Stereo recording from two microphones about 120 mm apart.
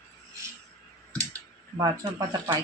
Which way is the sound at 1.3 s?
30° right (ahead or behind).